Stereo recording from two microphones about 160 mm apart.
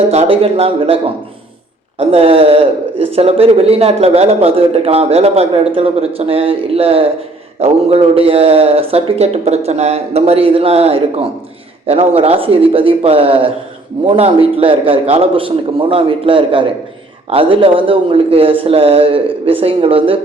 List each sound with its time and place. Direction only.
0.1 s speech: 40° right (ahead or behind)